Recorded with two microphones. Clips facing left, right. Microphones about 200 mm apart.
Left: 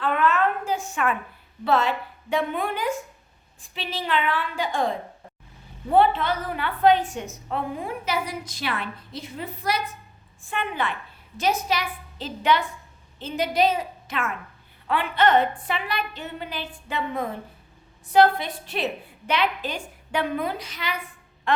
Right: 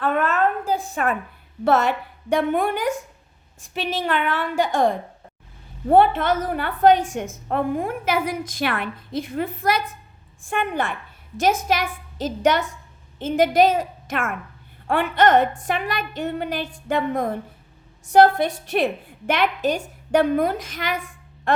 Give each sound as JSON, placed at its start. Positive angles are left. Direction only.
{"t": 0.0, "sound": "a sound", "side_deg": -45}
{"t": 1.6, "sound": "a woman's voice", "side_deg": -50}
{"t": 5.9, "sound": "a woman's voice", "side_deg": -50}